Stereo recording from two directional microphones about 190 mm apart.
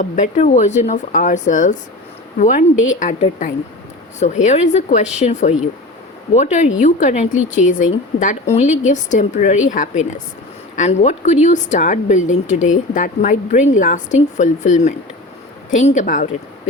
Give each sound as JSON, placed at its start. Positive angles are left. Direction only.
{"t": 0.0, "sound": "speech", "side_deg": 40}